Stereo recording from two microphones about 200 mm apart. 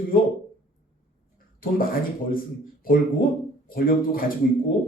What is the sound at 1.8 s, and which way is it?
Speech, 45° left (ahead or behind).